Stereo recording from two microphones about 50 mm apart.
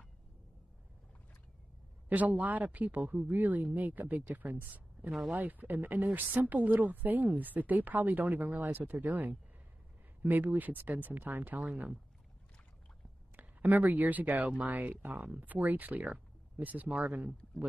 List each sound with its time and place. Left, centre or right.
2.0 s speech: right
4.6 s a sound: right
5.3 s speech: right
13.4 s speech: right
16.1 s a sound: right
17.0 s speech: right